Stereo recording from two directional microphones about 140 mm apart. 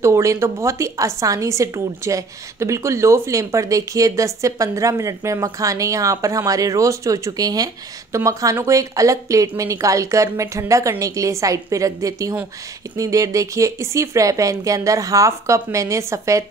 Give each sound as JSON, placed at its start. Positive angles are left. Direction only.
{"t": 0.0, "sound": "a woman's voice", "side_deg": -20}